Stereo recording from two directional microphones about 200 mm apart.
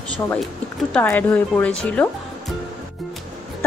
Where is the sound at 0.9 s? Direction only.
10° left (ahead or behind).